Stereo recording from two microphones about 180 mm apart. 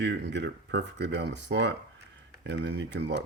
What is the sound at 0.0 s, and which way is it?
Speech, 70° right (ahead or behind).